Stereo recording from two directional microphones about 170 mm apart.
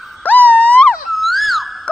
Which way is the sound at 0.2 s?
10° left (ahead or behind).